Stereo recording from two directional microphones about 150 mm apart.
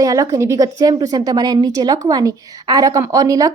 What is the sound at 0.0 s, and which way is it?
A woman's voice, 25° right (ahead or behind).